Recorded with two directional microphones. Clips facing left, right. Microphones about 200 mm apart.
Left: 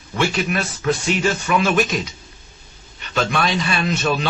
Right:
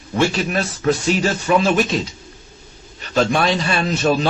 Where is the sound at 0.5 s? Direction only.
40° right (ahead or behind).